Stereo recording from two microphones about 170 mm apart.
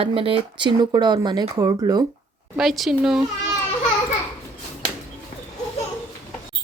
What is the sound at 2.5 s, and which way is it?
Speech, centre (ahead or behind).